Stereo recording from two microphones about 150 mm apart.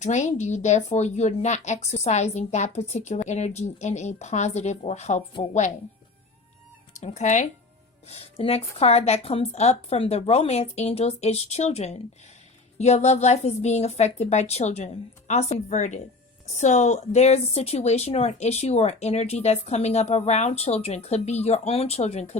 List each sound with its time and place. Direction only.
0.0 s speech: 50° left (ahead or behind)
7.0 s speech: 50° left (ahead or behind)